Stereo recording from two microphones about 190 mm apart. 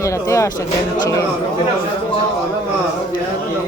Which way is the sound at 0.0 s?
15° left (ahead or behind).